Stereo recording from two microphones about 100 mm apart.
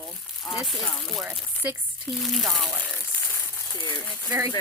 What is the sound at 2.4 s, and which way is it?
Speech, centre (ahead or behind).